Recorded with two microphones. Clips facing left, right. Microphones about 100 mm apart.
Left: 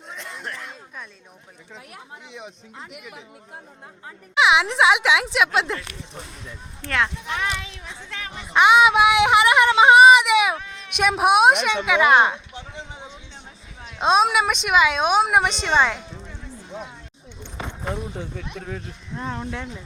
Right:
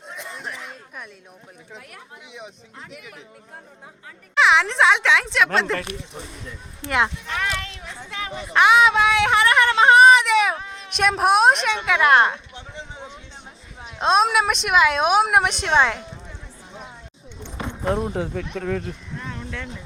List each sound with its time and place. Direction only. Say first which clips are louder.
0.1 s a sound: even; 10° right (ahead or behind)
2.3 s a woman's voice: right 1 dB; centre (ahead or behind)
2.9 s speech: left 1 dB; 10° left (ahead or behind)
4.4 s a woman's voice: even; 5° left (ahead or behind)
6.8 s speech: right 2 dB; 20° right (ahead or behind)
7.3 s speech: even; 15° left (ahead or behind)
7.7 s a woman's voice: right 1 dB; centre (ahead or behind)
8.5 s a sound: left 1 dB; 5° left (ahead or behind)
10.8 s a woman's voice: even; 5° left (ahead or behind)
14.0 s a woman's voice: even; centre (ahead or behind)
17.9 s speech: right 7 dB; 60° right (ahead or behind); by 18.4 s 75° right (ahead or behind)
19.1 s a sound: left 9 dB; 35° left (ahead or behind)